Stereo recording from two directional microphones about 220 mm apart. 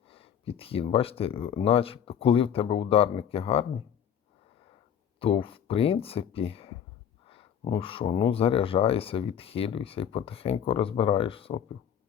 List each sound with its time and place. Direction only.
0.1 s speech: 25° left (ahead or behind)
5.2 s speech: 25° left (ahead or behind)